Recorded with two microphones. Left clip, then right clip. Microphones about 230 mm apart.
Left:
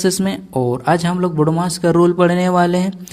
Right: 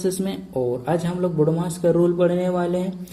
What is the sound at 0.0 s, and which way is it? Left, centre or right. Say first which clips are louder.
A man's voice: left 6 dB; left.